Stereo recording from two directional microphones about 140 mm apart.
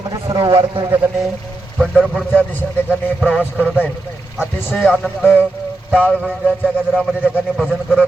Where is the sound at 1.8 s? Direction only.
5° right (ahead or behind).